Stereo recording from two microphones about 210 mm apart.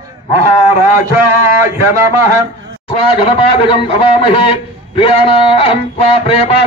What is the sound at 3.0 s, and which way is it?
A man's voice, 25° left (ahead or behind).